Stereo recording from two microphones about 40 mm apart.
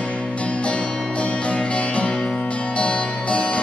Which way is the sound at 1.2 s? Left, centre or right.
Left.